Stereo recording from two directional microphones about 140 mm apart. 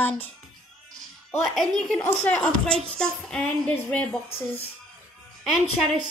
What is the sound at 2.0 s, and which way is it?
A woman's voice, 15° left (ahead or behind).